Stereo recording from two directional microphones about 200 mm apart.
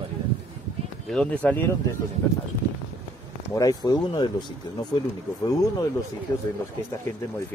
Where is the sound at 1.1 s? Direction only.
5° left (ahead or behind).